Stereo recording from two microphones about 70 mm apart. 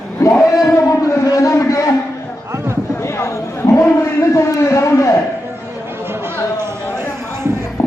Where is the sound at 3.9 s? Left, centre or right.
Left.